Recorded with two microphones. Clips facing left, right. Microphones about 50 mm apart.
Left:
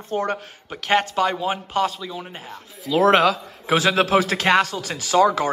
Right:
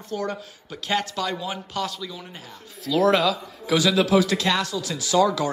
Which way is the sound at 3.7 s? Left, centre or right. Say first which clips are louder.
Left 1 dB; left.